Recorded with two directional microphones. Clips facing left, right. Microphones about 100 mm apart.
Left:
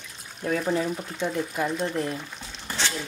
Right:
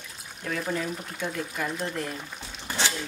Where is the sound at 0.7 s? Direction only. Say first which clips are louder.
Left 4 dB; 25° left (ahead or behind).